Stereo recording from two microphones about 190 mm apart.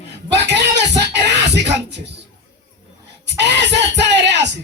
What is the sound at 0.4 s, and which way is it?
Music, 65° right (ahead or behind).